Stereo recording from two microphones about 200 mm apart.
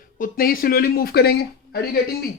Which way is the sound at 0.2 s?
45° left (ahead or behind).